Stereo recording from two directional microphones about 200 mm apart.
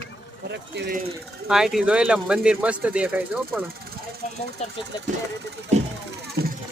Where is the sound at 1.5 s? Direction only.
Centre (ahead or behind).